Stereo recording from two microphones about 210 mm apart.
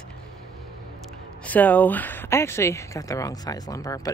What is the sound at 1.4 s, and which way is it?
Speech, 5° left (ahead or behind).